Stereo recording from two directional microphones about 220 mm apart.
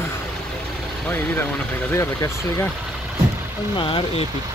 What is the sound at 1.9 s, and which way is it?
Speech, 15° left (ahead or behind).